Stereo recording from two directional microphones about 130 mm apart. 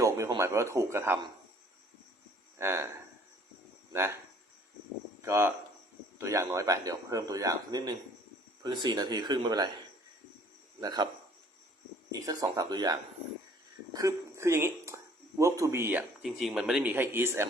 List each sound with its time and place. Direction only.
0.3 s a man's voice: 20° right (ahead or behind)
2.6 s a man's voice: 20° right (ahead or behind)
3.9 s a man's voice: 20° right (ahead or behind)
5.2 s a man's voice: 20° right (ahead or behind)
10.8 s speech: 30° right (ahead or behind)
12.1 s a man's voice: 30° right (ahead or behind)
16.2 s speech: 5° right (ahead or behind)
16.9 s speech: 15° right (ahead or behind)